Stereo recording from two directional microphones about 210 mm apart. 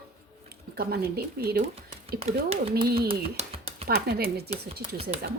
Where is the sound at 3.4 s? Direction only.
35° right (ahead or behind).